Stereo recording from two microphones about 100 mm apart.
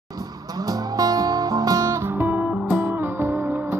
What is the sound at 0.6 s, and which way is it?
Music, 35° right (ahead or behind).